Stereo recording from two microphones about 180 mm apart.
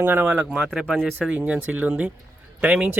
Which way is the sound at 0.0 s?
10° right (ahead or behind).